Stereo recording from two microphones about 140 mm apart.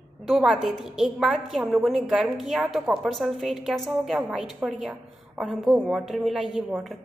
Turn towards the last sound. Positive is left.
turn(degrees=-5)  # may be behind; listen again after turning